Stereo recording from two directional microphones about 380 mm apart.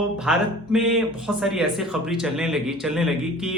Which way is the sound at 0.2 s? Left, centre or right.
Centre.